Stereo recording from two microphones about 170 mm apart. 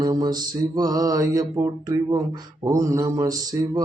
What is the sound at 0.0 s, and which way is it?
Mantra, 25° right (ahead or behind).